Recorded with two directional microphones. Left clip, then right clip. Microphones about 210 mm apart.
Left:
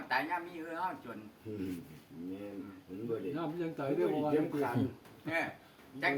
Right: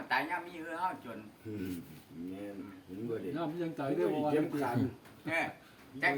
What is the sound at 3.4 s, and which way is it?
A man's voice, 20° right (ahead or behind).